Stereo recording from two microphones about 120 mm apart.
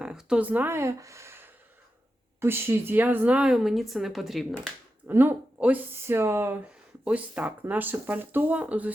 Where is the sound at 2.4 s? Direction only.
20° right (ahead or behind); by 4.7 s centre (ahead or behind).